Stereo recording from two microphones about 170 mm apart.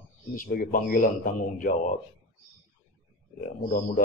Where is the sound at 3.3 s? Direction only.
50° left (ahead or behind).